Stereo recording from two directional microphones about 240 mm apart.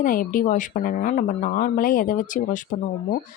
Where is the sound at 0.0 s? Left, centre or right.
Left.